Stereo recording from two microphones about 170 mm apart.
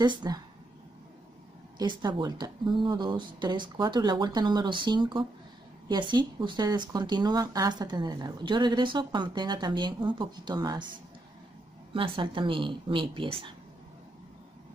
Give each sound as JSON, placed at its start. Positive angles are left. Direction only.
{"t": 0.0, "sound": "speech", "side_deg": -25}
{"t": 1.8, "sound": "speech", "side_deg": -25}
{"t": 11.9, "sound": "speech", "side_deg": -30}